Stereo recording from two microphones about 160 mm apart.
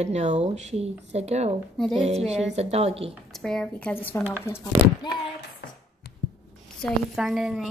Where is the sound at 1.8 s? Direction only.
Centre (ahead or behind).